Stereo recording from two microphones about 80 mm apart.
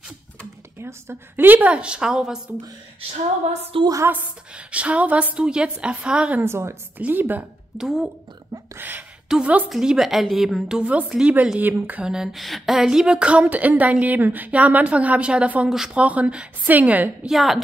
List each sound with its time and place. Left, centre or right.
0.7 s a woman's voice: right; by 2.5 s centre
3.7 s a woman's voice: right
4.1 s a woman's voice: centre
6.4 s a woman's voice: right
7.0 s a woman's voice: right
7.7 s a woman's voice: centre
8.7 s a sound: right
9.3 s a woman's voice: centre
9.7 s a woman's voice: centre
11.6 s a woman's voice: right
12.0 s a woman's voice: centre
15.7 s a woman's voice: centre
16.0 s a woman's voice: centre
17.3 s a woman's voice: centre